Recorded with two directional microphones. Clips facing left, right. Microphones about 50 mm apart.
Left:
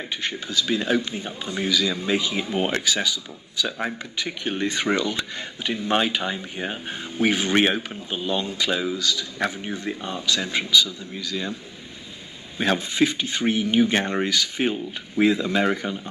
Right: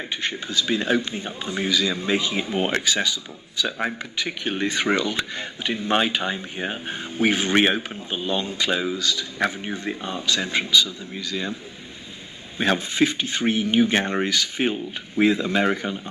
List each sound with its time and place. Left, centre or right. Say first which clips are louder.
0.1 s a man's voice: right 1 dB; right
4.3 s a man's voice: even; right
4.7 s a man's voice: right 2 dB; right
12.5 s a man's voice: right 1 dB; right